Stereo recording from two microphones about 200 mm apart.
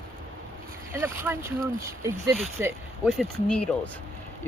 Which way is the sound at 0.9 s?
10° right (ahead or behind).